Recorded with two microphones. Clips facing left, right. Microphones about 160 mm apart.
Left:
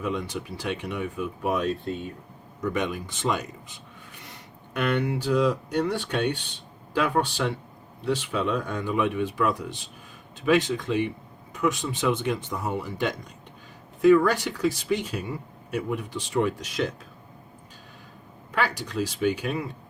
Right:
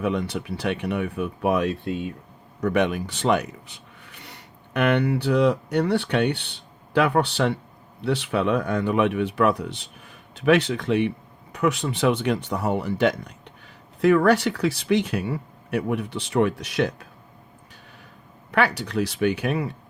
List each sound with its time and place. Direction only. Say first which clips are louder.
0.0 s speech: right 4 dB; 70° right (ahead or behind)
18.5 s speech: right 5 dB; 70° right (ahead or behind)